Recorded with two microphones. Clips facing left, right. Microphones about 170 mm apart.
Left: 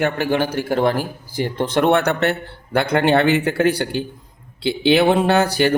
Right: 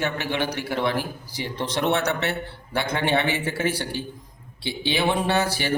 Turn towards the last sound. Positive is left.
turn(degrees=60)  # may be behind; listen again after turning